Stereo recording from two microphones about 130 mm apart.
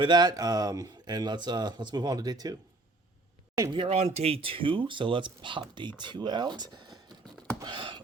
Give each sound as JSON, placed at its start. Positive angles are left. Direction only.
{"t": 0.0, "sound": "speech", "side_deg": -35}
{"t": 3.7, "sound": "speech", "side_deg": -45}
{"t": 7.6, "sound": "a sound", "side_deg": -40}